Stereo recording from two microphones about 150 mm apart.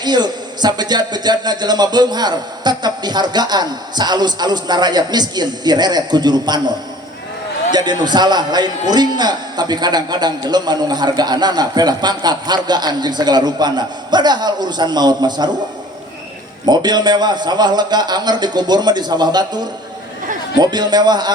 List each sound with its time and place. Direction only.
0.0 s a man's voice: 30° right (ahead or behind)
16.6 s a man's voice: 30° right (ahead or behind)